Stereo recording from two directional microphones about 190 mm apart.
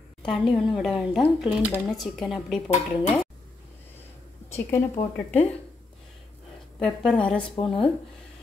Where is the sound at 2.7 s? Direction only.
35° left (ahead or behind).